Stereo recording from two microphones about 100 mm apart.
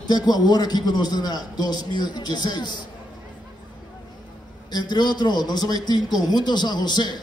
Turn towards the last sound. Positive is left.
turn(degrees=45)  # may be behind; listen again after turning